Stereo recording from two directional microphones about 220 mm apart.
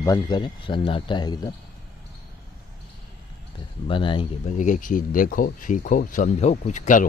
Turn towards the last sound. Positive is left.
turn(degrees=35)  # may be behind; listen again after turning